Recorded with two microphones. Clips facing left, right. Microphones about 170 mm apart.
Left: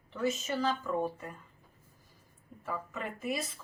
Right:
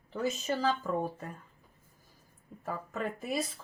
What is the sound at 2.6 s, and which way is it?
Speech, 40° right (ahead or behind).